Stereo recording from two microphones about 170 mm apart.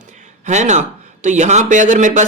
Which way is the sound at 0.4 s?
45° right (ahead or behind).